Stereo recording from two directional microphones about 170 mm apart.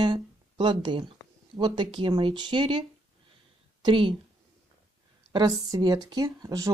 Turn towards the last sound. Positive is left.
turn(degrees=-20)  # may be behind; listen again after turning